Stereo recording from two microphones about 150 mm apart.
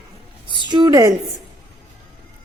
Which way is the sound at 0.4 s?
30° right (ahead or behind).